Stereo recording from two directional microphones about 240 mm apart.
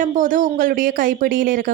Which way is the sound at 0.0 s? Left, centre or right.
Right.